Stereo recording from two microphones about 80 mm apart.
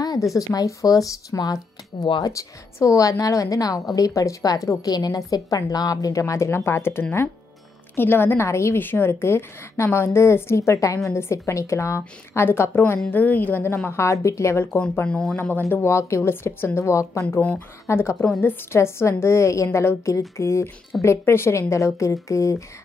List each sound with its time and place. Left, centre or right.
0.0 s a woman's voice: left
13.8 s a woman's voice: left
15.0 s speech: centre
15.7 s a woman's voice: left